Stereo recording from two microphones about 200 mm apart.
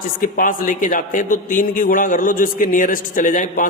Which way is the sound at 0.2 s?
45° left (ahead or behind).